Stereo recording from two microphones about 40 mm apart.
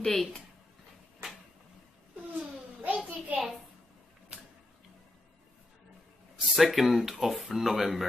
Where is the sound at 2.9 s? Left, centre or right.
Right.